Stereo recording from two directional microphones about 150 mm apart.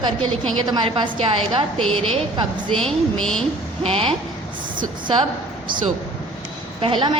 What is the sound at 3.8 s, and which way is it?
Speech, 35° right (ahead or behind).